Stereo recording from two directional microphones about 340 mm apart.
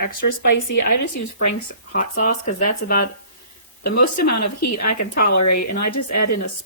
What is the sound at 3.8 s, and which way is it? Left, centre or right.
Speech, left.